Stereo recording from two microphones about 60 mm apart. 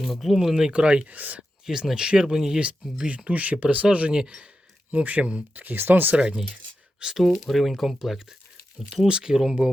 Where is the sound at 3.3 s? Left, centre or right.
Right.